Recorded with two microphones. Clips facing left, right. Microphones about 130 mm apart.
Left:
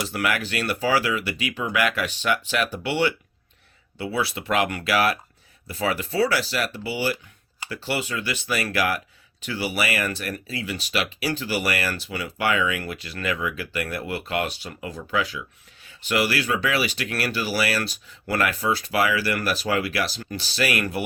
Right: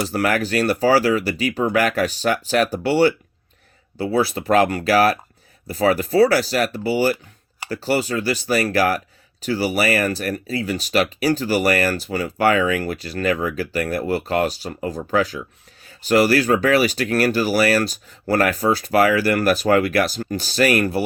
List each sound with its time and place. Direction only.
0.0 s speech: 35° right (ahead or behind)